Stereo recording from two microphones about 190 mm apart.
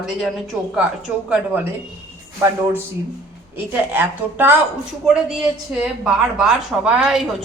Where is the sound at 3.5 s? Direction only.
10° right (ahead or behind).